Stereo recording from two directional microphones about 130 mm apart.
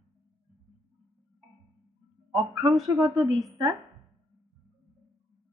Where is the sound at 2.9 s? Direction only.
35° right (ahead or behind).